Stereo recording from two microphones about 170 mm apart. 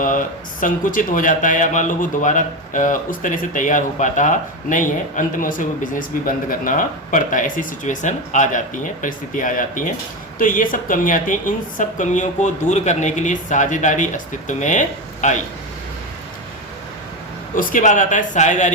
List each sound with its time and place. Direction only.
0.0 s speech: 50° left (ahead or behind)
17.6 s speech: 50° left (ahead or behind)